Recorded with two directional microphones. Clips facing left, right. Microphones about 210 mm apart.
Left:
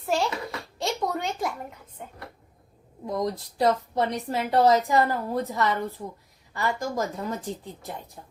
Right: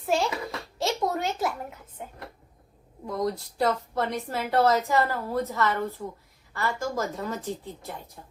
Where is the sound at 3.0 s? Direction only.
20° left (ahead or behind).